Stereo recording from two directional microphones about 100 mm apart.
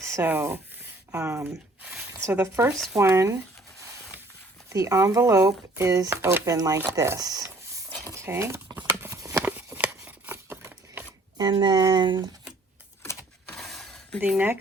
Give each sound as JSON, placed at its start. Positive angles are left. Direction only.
{"t": 0.0, "sound": "speech", "side_deg": -25}
{"t": 1.8, "sound": "speech", "side_deg": -5}
{"t": 2.3, "sound": "speech", "side_deg": -20}
{"t": 2.7, "sound": "speech", "side_deg": 0}
{"t": 3.0, "sound": "speech", "side_deg": -30}
{"t": 4.7, "sound": "speech", "side_deg": -30}
{"t": 8.0, "sound": "cutlery", "side_deg": -30}
{"t": 8.9, "sound": "horse", "side_deg": -25}
{"t": 9.4, "sound": "a sound", "side_deg": -15}
{"t": 11.3, "sound": "speech", "side_deg": -45}
{"t": 13.5, "sound": "shatter", "side_deg": 0}
{"t": 14.2, "sound": "speech", "side_deg": -15}